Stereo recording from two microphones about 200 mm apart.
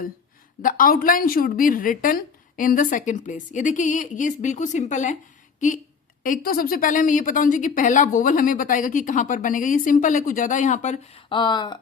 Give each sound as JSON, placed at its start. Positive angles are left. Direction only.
{"t": 0.6, "sound": "a woman's voice", "side_deg": 45}
{"t": 11.3, "sound": "speech", "side_deg": 20}